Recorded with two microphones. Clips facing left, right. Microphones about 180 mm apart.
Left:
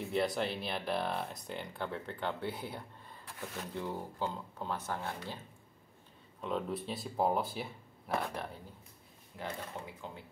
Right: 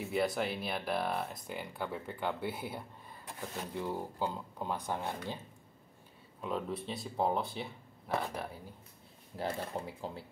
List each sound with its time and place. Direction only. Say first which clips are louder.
0.0 s speech: even; 5° right (ahead or behind)
6.4 s speech: left 1 dB; centre (ahead or behind)
9.4 s speech: right 5 dB; 35° right (ahead or behind)